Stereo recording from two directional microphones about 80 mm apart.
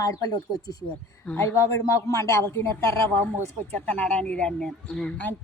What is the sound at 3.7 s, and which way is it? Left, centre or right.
Speech, centre.